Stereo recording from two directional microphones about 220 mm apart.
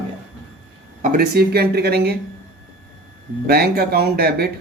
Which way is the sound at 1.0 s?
40° right (ahead or behind).